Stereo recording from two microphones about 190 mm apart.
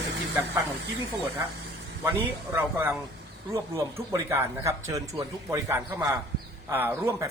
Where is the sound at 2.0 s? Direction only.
10° right (ahead or behind).